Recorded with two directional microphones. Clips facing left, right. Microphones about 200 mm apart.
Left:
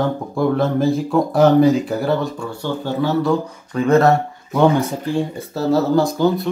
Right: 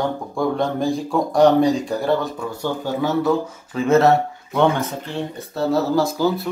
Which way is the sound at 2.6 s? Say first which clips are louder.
Left 2 dB; 10° right (ahead or behind).